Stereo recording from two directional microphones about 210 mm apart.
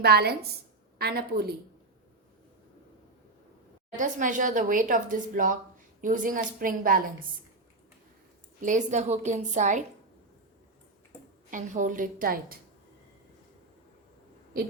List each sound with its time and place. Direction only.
0.0 s a woman's voice: 50° right (ahead or behind)
3.9 s speech: 35° right (ahead or behind)
8.6 s speech: 35° right (ahead or behind)
11.5 s speech: 40° right (ahead or behind)